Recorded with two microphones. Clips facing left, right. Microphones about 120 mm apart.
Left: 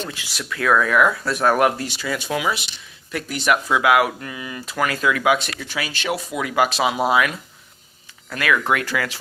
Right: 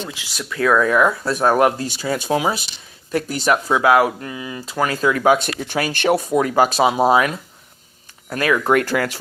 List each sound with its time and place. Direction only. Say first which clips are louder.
0.3 s speech: right 2 dB; 25° right (ahead or behind)
5.6 s speech: right 10 dB; 50° right (ahead or behind)
6.3 s speech: right 5 dB; 35° right (ahead or behind)
8.7 s speech: right 5 dB; 45° right (ahead or behind)